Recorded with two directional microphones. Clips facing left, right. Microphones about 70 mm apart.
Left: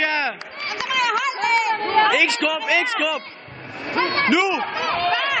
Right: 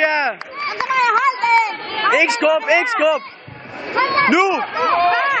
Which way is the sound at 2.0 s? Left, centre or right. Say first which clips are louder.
Right 4 dB; right.